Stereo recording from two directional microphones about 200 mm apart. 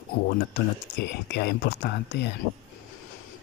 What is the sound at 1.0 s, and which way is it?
Speech, 55° left (ahead or behind).